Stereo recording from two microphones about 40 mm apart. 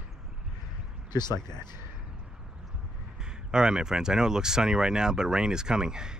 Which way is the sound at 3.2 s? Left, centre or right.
Centre.